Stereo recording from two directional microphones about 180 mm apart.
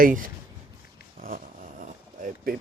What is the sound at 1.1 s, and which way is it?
Zipper, 50° right (ahead or behind).